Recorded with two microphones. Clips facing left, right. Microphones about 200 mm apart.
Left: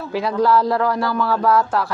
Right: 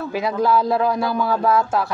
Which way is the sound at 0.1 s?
20° right (ahead or behind).